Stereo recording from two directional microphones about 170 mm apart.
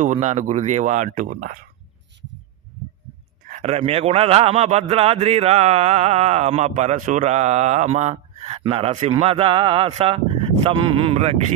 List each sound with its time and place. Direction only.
0.0 s speech: 40° right (ahead or behind)
3.4 s a man's voice: 40° right (ahead or behind)